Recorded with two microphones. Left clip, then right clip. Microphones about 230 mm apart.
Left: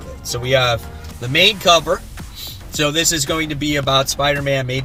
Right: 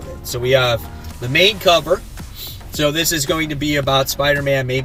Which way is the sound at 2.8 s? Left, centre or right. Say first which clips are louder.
Even; centre.